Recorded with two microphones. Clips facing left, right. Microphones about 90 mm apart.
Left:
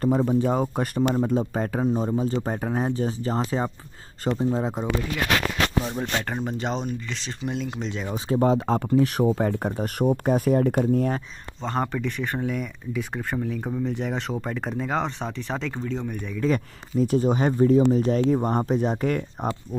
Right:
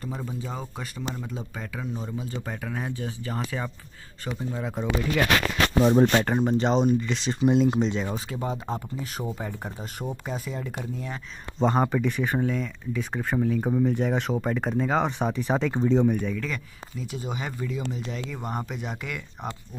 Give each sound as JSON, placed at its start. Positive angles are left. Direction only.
{"t": 0.0, "sound": "speech", "side_deg": 55}
{"t": 5.9, "sound": "speech", "side_deg": -35}
{"t": 6.2, "sound": "speech", "side_deg": 0}
{"t": 7.8, "sound": "speech", "side_deg": 0}
{"t": 8.4, "sound": "speech", "side_deg": 75}
{"t": 11.6, "sound": "speech", "side_deg": -10}
{"t": 16.1, "sound": "speech", "side_deg": 0}
{"t": 17.0, "sound": "speech", "side_deg": 45}